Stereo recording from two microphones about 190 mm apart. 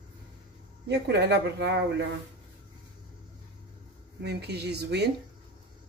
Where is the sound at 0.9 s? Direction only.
60° right (ahead or behind).